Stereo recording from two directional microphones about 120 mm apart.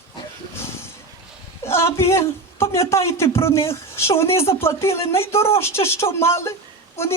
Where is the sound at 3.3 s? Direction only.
20° left (ahead or behind).